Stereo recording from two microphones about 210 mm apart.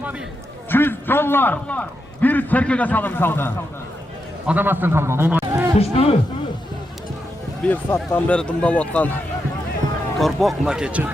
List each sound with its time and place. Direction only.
0.7 s a man's voice: 10° left (ahead or behind)
4.4 s a man's voice: 10° right (ahead or behind)
5.8 s speech: 30° left (ahead or behind)
7.7 s speech: 10° left (ahead or behind)
10.2 s speech: centre (ahead or behind)